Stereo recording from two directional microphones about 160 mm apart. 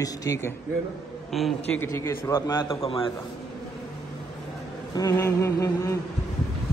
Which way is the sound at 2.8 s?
35° left (ahead or behind).